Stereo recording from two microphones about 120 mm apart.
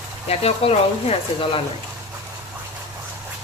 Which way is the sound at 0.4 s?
55° left (ahead or behind).